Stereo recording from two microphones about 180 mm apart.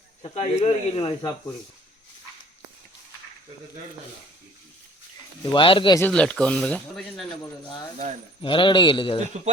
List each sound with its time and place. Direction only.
0.2 s speech: 35° left (ahead or behind)
5.5 s speech: 30° left (ahead or behind)
6.0 s speech: 5° left (ahead or behind)
8.4 s speech: 30° left (ahead or behind)